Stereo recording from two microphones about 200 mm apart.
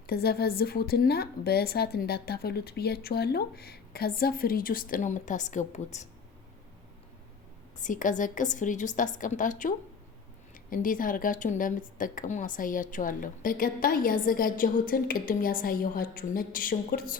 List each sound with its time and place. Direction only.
0.1 s a woman's voice: 50° left (ahead or behind); by 6.1 s 35° left (ahead or behind)
7.8 s a woman's voice: 40° left (ahead or behind)